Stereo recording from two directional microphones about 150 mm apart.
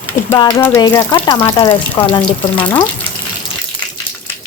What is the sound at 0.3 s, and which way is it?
Speech, 20° left (ahead or behind).